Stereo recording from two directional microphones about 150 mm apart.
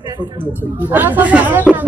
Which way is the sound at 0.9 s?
10° right (ahead or behind).